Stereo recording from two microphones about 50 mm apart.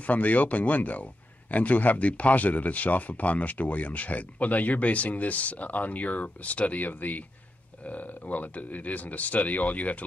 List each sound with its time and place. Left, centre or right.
0.0 s a man's voice: left